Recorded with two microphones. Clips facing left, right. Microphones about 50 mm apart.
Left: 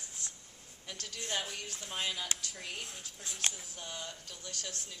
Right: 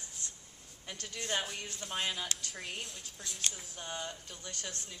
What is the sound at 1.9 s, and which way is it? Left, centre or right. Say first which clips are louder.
Speech: right 1 dB; centre.